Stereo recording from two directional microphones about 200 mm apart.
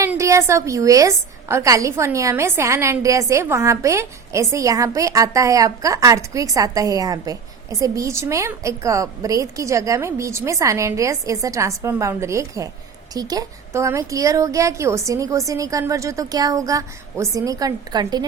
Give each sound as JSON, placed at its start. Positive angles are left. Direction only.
{"t": 0.0, "sound": "a woman's voice", "side_deg": -15}